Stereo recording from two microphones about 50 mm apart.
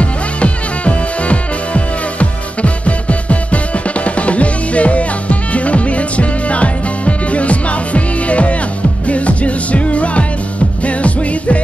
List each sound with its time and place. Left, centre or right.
0.0 s music: left